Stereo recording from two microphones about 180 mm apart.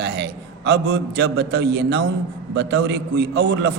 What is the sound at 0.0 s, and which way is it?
A man's voice, 70° right (ahead or behind).